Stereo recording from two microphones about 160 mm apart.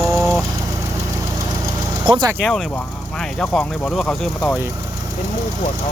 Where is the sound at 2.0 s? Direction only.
30° right (ahead or behind).